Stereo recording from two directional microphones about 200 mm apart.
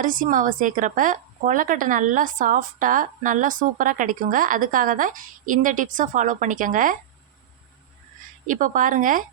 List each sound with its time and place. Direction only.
0.0 s a woman's voice: 40° right (ahead or behind)
8.4 s a woman's voice: 40° right (ahead or behind)